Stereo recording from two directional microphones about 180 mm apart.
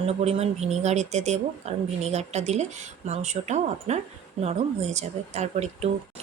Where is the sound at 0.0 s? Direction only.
35° right (ahead or behind).